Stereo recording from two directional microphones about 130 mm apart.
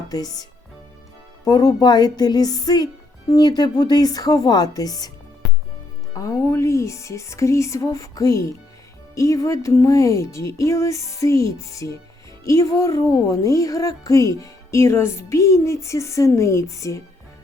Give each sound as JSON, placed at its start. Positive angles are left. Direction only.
{"t": 0.1, "sound": "speech", "side_deg": 30}
{"t": 1.5, "sound": "speech", "side_deg": 30}
{"t": 5.4, "sound": "music", "side_deg": 5}
{"t": 6.1, "sound": "speech", "side_deg": 25}